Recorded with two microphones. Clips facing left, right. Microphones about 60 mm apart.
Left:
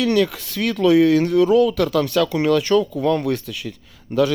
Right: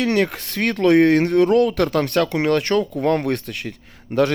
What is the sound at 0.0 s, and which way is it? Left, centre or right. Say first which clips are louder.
Speech: left 1 dB; right.